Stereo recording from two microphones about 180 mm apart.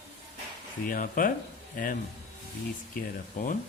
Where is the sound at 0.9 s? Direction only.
50° left (ahead or behind).